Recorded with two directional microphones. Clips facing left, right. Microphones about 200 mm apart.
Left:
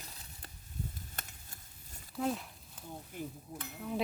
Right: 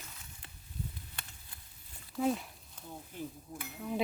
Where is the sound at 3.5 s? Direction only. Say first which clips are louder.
Right 1 dB; 5° right (ahead or behind).